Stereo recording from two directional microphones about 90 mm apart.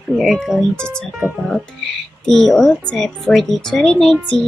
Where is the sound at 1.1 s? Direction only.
10° right (ahead or behind).